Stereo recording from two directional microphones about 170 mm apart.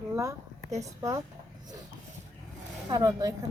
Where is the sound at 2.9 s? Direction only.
20° right (ahead or behind).